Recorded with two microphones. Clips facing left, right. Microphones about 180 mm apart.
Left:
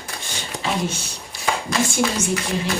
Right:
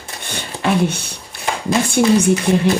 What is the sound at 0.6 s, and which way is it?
Speech, 60° right (ahead or behind).